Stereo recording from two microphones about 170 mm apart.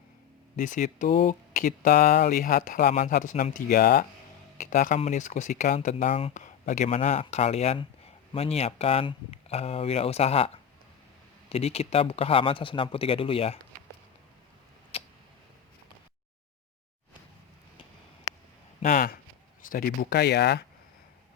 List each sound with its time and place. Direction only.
0.5 s speech: 50° left (ahead or behind)
4.5 s speech: 50° left (ahead or behind)
14.9 s tick-tock: 35° left (ahead or behind)
18.8 s a sound: 50° left (ahead or behind)
19.7 s speech: 65° left (ahead or behind)